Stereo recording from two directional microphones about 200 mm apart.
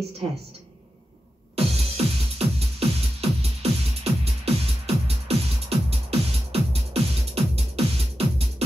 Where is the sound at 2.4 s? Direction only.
30° right (ahead or behind).